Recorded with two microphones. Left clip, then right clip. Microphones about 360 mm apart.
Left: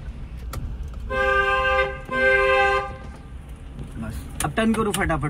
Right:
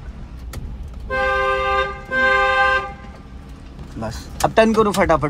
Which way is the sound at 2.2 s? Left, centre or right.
Right.